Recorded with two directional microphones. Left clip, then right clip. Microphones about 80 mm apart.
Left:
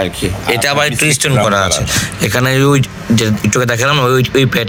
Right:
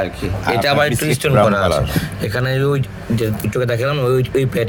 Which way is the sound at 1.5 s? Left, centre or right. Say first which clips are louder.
Left 3 dB; left.